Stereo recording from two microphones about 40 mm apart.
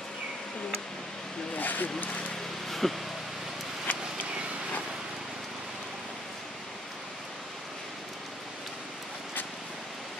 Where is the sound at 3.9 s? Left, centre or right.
Left.